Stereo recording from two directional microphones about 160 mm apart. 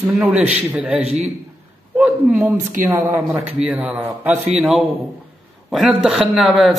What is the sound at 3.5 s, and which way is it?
Speech, 5° right (ahead or behind).